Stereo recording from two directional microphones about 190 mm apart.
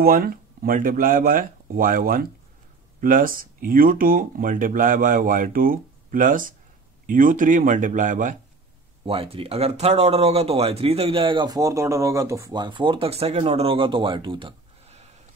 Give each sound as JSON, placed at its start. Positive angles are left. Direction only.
{"t": 0.0, "sound": "speech", "side_deg": -50}
{"t": 9.0, "sound": "speech", "side_deg": -30}